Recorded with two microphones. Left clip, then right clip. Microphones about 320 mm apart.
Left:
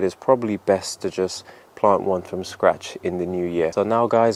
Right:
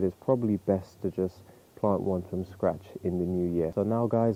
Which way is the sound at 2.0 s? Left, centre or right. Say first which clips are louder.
Left 8 dB; centre.